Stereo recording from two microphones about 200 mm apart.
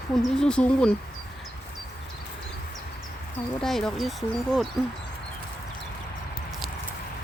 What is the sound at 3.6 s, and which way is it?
Speech, centre (ahead or behind).